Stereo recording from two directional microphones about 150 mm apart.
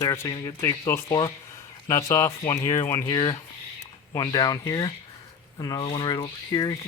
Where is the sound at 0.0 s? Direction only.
25° left (ahead or behind).